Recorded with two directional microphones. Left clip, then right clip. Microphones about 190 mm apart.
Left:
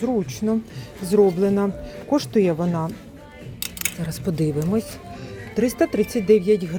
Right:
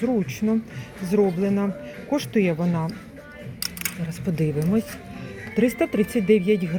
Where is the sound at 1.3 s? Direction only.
25° left (ahead or behind).